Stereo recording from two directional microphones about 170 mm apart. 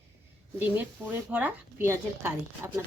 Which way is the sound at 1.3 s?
10° right (ahead or behind).